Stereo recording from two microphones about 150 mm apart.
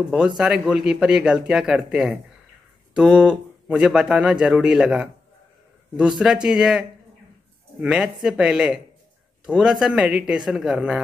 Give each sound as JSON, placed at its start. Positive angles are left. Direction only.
{"t": 0.4, "sound": "speech", "side_deg": -5}